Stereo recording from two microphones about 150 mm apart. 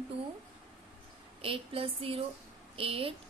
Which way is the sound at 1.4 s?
35° right (ahead or behind).